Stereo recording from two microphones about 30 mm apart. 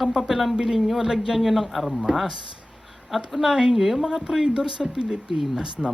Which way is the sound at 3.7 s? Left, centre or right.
Centre.